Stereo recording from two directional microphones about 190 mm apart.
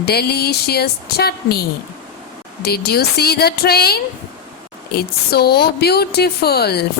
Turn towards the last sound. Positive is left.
turn(degrees=55)  # may be behind; listen again after turning